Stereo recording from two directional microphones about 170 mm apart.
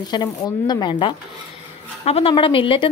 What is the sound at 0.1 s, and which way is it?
A woman's voice, 25° left (ahead or behind).